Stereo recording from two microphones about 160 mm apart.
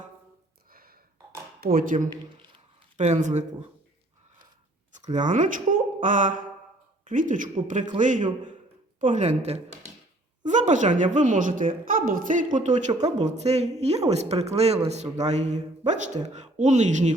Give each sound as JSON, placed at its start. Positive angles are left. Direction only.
{"t": 0.7, "sound": "a sound", "side_deg": -65}
{"t": 1.6, "sound": "a woman's voice", "side_deg": -60}
{"t": 5.1, "sound": "a woman's voice", "side_deg": -50}